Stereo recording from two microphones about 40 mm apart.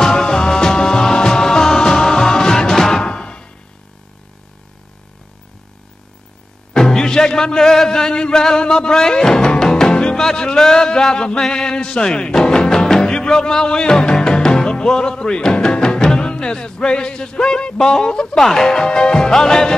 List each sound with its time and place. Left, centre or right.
0.0 s music: centre
6.7 s music: centre
18.4 s music: centre